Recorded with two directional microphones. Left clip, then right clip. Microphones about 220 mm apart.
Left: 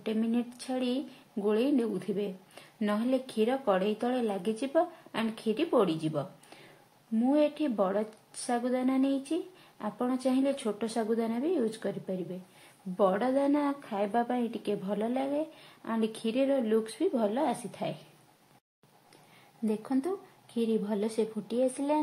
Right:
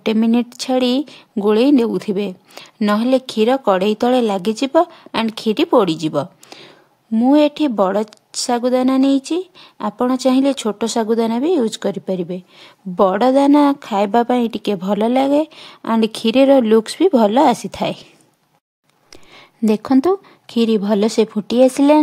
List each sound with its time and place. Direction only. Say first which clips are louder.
0.0 s speech: right 15 dB; 50° right (ahead or behind)
19.6 s speech: right 17 dB; 50° right (ahead or behind)